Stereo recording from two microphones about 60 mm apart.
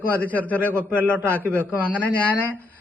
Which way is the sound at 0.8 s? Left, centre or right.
Right.